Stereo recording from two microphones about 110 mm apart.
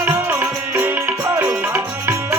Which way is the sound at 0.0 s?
20° right (ahead or behind).